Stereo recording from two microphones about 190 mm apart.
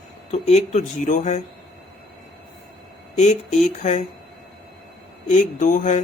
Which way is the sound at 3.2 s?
35° left (ahead or behind).